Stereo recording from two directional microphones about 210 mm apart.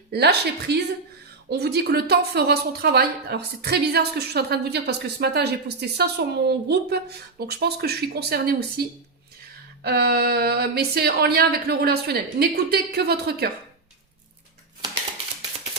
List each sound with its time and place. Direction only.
0.1 s a woman's voice: 50° right (ahead or behind)
9.8 s a woman's voice: 50° right (ahead or behind)